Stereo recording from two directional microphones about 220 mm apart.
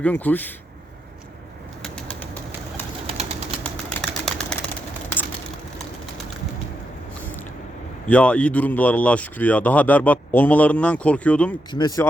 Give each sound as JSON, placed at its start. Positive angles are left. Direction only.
{"t": 0.0, "sound": "speech", "side_deg": 5}
{"t": 1.8, "sound": "bird", "side_deg": 5}
{"t": 3.1, "sound": "a sound", "side_deg": -30}
{"t": 3.6, "sound": "bird", "side_deg": 5}
{"t": 7.2, "sound": "a sound", "side_deg": 10}
{"t": 8.1, "sound": "speech", "side_deg": 5}
{"t": 11.7, "sound": "speech", "side_deg": 20}